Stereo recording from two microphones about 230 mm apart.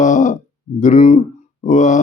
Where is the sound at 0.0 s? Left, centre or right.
Left.